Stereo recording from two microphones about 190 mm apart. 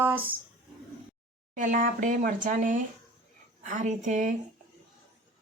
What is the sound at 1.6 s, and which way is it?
A woman's voice, 40° right (ahead or behind).